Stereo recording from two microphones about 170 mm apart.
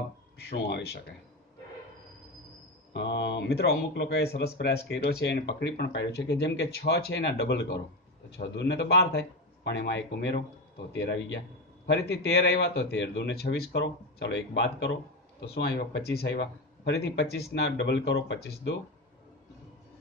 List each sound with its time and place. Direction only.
0.4 s a man's voice: 70° left (ahead or behind)
2.9 s a man's voice: 85° left
10.9 s a man's voice: 80° left
15.4 s a man's voice: 70° left (ahead or behind)